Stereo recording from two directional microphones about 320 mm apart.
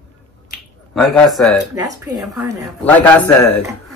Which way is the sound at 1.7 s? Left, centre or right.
Centre.